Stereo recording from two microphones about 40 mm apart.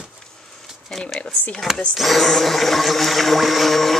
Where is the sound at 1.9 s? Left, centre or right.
Centre.